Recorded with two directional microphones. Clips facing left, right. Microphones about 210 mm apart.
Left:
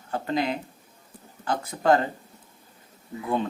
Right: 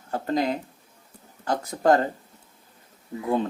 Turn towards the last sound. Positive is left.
turn(degrees=-40)  # may be behind; listen again after turning